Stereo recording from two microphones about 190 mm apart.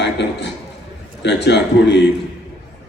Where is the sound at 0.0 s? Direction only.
65° left (ahead or behind).